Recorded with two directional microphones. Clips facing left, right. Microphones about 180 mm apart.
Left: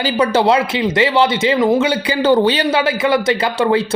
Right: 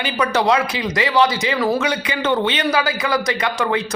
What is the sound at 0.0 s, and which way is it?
A man's voice, 30° left (ahead or behind).